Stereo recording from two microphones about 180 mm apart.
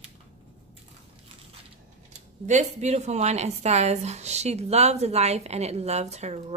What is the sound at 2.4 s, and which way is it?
A woman's voice, 40° right (ahead or behind).